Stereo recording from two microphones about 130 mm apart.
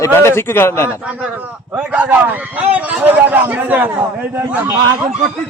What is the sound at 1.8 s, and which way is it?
A man's voice, 10° right (ahead or behind).